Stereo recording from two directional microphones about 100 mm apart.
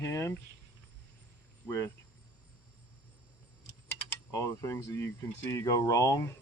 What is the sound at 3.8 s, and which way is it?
Speech, 30° left (ahead or behind).